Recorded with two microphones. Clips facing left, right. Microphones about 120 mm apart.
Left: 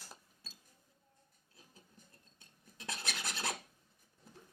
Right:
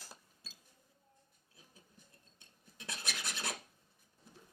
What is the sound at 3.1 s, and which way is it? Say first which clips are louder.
Filing: left 2 dB; 25° left (ahead or behind).